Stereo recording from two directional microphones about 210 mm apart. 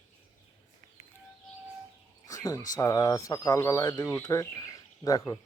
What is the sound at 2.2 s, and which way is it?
Speech, 15° left (ahead or behind).